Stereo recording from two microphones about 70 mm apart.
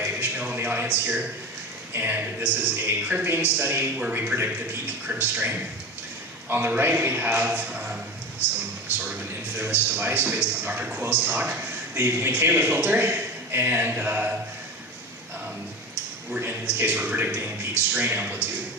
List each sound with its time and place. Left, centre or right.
0.0 s a sound: right
1.9 s a man's voice: right
8.4 s speech: left
9.6 s a man's voice: right
11.9 s a man's voice: right
16.4 s a man's voice: right